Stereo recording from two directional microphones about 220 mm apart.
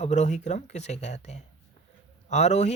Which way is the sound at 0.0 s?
30° left (ahead or behind).